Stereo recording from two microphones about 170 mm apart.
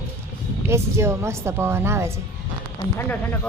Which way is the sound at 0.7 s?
15° right (ahead or behind).